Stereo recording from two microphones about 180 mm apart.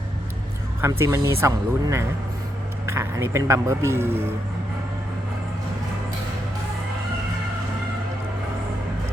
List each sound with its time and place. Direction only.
0.8 s speech: 15° right (ahead or behind)